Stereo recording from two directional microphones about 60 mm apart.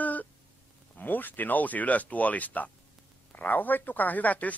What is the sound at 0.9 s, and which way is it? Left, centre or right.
Speech, left.